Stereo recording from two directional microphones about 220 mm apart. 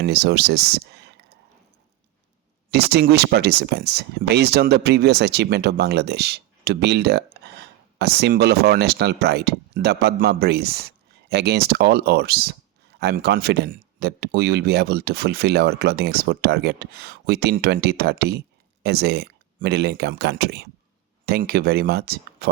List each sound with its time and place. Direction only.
0.0 s speech: 50° right (ahead or behind)
2.7 s speech: 45° right (ahead or behind)